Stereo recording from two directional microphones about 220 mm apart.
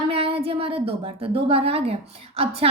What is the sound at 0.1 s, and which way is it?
A woman's voice, 25° right (ahead or behind).